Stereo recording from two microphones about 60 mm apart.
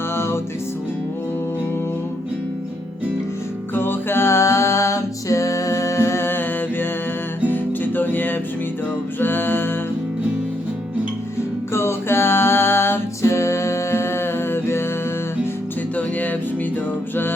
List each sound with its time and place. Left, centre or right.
0.1 s music: left
3.8 s music: left
11.7 s music: left
16.0 s music: left